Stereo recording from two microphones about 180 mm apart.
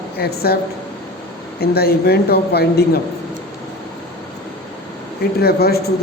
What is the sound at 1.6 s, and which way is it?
A woman's voice, 60° left (ahead or behind).